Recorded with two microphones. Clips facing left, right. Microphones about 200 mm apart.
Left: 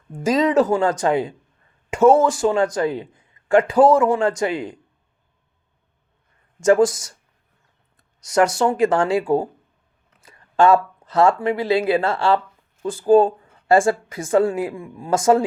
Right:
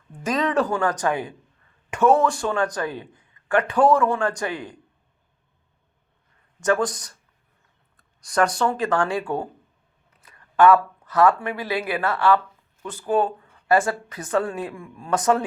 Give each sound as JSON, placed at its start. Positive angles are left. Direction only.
{"t": 0.3, "sound": "speech", "side_deg": 25}
{"t": 6.6, "sound": "speech", "side_deg": 25}
{"t": 8.5, "sound": "speech", "side_deg": 25}